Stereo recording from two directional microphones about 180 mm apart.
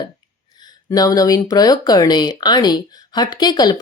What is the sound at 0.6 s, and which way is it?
A woman's voice, 20° left (ahead or behind).